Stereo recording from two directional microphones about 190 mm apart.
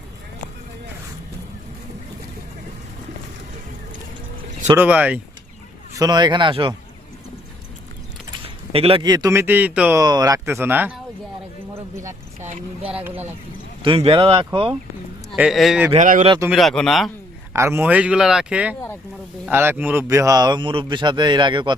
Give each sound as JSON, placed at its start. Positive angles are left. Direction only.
{"t": 4.8, "sound": "speech", "side_deg": -5}
{"t": 5.9, "sound": "speech", "side_deg": -20}
{"t": 8.7, "sound": "speech", "side_deg": -30}
{"t": 10.0, "sound": "speech", "side_deg": -20}
{"t": 12.4, "sound": "speech", "side_deg": -40}
{"t": 12.9, "sound": "speech", "side_deg": -10}
{"t": 13.8, "sound": "speech", "side_deg": -30}
{"t": 15.3, "sound": "speech", "side_deg": 0}
{"t": 15.9, "sound": "speech", "side_deg": -40}
{"t": 16.5, "sound": "speech", "side_deg": 0}
{"t": 17.5, "sound": "speech", "side_deg": -15}